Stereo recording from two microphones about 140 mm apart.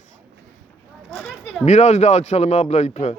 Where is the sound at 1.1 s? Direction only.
Centre (ahead or behind).